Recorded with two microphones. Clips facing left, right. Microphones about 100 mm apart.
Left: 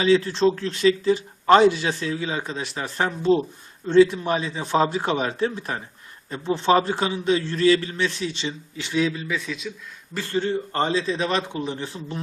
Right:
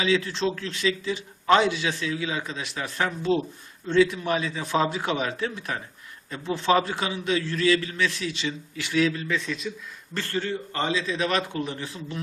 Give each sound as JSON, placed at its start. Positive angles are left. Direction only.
{"t": 0.0, "sound": "a man's voice", "side_deg": 35}
{"t": 10.2, "sound": "speech", "side_deg": 15}
{"t": 10.7, "sound": "speech", "side_deg": 35}